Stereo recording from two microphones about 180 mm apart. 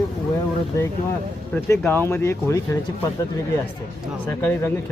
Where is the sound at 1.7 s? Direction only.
10° left (ahead or behind).